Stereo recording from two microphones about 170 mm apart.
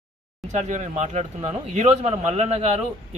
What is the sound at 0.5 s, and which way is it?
A woman's voice, 45° right (ahead or behind).